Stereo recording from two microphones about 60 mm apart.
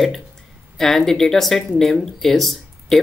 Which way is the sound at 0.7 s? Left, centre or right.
Centre.